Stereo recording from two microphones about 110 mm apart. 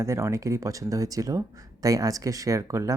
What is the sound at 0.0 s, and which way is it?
Speech, 25° right (ahead or behind).